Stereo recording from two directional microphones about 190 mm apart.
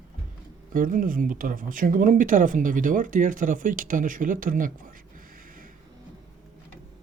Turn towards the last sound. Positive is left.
turn(degrees=-45)  # may be behind; listen again after turning